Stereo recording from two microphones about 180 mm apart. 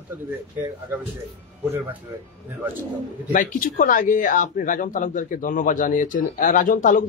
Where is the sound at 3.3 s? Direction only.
50° left (ahead or behind).